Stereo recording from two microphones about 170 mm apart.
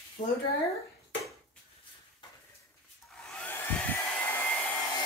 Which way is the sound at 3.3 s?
10° left (ahead or behind).